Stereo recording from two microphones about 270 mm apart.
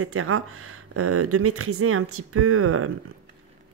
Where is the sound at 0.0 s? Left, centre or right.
Right.